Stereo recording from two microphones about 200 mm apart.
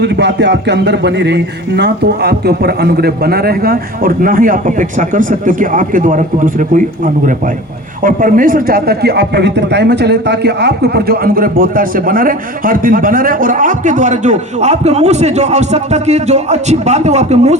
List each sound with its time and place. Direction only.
0.0 s speech: 60° right (ahead or behind); by 17.6 s 35° right (ahead or behind)